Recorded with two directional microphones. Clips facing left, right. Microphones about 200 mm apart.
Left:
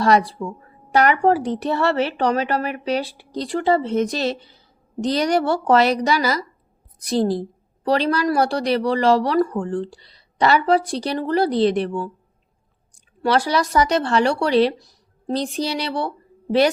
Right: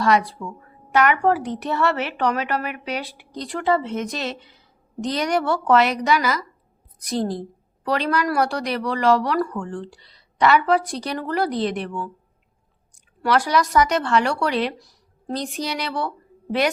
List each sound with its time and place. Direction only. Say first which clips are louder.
0.0 s a woman's voice: left 2 dB; 35° left (ahead or behind)
13.2 s a woman's voice: left 1 dB; 30° left (ahead or behind)